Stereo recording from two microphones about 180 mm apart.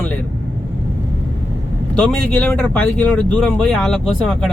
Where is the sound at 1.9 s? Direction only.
5° left (ahead or behind).